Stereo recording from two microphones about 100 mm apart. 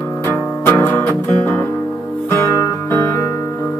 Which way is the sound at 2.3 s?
20° left (ahead or behind).